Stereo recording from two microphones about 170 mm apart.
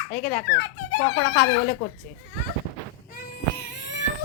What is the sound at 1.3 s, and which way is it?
Speech, 90° left.